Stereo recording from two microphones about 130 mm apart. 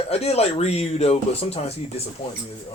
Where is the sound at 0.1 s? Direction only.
55° left (ahead or behind).